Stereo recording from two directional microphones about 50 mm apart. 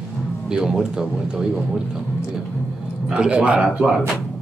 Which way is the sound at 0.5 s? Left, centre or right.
Centre.